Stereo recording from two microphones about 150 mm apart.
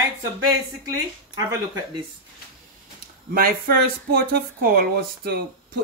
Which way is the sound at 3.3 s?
75° right (ahead or behind).